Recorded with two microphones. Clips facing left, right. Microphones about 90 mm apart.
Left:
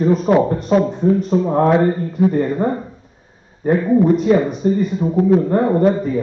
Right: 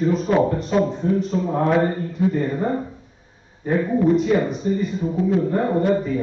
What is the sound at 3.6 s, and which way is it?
Speech, 45° left (ahead or behind).